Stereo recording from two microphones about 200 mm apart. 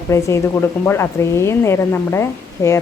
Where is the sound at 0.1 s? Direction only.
15° left (ahead or behind).